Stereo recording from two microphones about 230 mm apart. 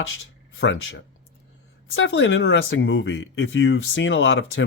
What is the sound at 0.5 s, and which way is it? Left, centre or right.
Speech, left.